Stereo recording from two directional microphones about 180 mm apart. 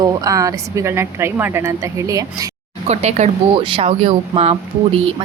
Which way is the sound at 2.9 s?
40° right (ahead or behind).